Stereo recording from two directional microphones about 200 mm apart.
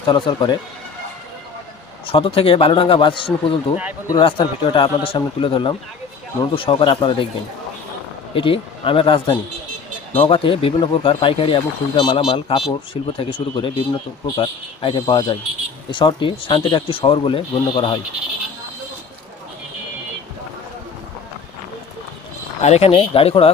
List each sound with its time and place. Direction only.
0.1 s speech: 20° left (ahead or behind)
2.0 s speech: 25° left (ahead or behind)
8.3 s speech: 25° left (ahead or behind)
22.6 s speech: 30° left (ahead or behind)